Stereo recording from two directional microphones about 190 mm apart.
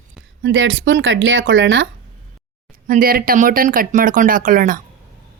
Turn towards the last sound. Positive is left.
turn(degrees=-45)  # may be behind; listen again after turning